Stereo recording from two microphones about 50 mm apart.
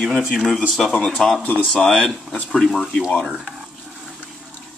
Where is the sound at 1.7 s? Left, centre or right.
Centre.